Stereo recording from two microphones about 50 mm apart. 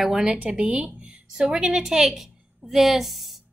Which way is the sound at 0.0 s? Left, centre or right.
Centre.